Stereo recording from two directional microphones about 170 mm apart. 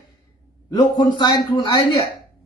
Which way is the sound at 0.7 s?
25° left (ahead or behind).